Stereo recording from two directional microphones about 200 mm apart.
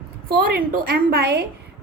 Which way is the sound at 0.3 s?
50° right (ahead or behind).